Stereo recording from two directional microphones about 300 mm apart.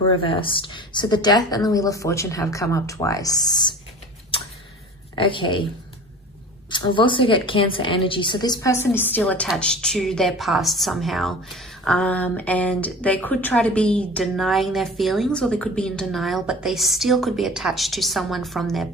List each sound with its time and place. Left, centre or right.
0.0 s a woman's voice: centre
5.1 s a woman's voice: centre
6.7 s a woman's voice: centre